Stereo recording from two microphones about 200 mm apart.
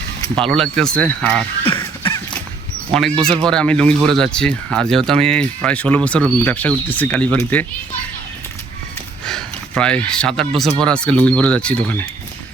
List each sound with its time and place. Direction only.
0.3 s speech: centre (ahead or behind)
1.6 s duck: 25° left (ahead or behind)
2.9 s speech: 5° left (ahead or behind)
9.2 s a sound: 5° left (ahead or behind)
10.8 s speech: 5° left (ahead or behind)